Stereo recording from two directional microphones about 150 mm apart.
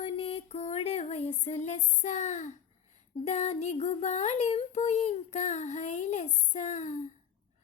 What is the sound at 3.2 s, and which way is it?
Child singing, 50° left (ahead or behind).